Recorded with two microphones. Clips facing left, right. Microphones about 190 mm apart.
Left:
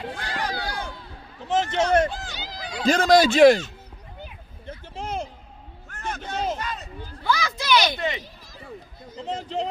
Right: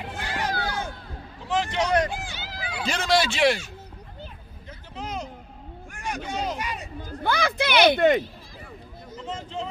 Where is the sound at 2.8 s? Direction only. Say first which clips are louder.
Left 7 dB; 45° left (ahead or behind).